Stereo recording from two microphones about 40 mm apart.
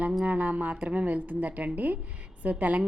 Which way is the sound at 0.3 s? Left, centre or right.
Right.